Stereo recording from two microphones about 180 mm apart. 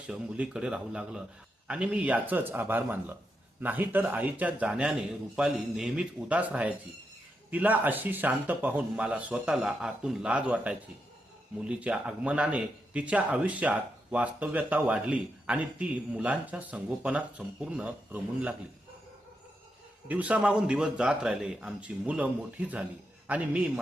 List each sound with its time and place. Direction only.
0.1 s a man's voice: 5° right (ahead or behind)
20.1 s a man's voice: 10° right (ahead or behind)